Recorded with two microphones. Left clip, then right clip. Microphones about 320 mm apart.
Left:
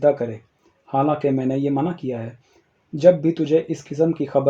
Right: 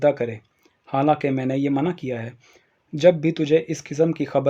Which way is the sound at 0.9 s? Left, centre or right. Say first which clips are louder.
Even; right.